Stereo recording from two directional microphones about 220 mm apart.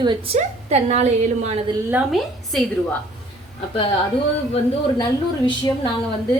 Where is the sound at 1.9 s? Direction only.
Centre (ahead or behind).